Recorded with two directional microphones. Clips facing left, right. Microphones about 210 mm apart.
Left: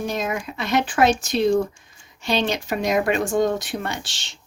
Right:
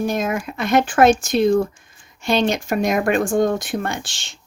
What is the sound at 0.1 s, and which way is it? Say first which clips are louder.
Speech: right 4 dB; 50° right (ahead or behind).